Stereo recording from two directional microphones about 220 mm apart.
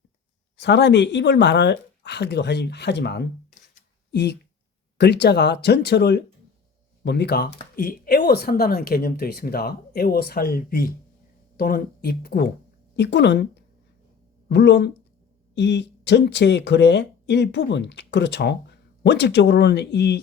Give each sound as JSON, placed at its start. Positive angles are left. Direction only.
{"t": 0.5, "sound": "speech", "side_deg": 50}